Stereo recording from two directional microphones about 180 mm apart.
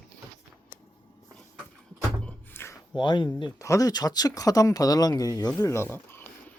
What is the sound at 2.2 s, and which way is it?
Thunk, 10° left (ahead or behind).